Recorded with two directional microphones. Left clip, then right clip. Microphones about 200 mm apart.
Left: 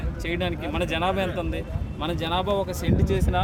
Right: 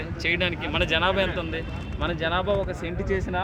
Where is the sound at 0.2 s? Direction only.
55° left (ahead or behind).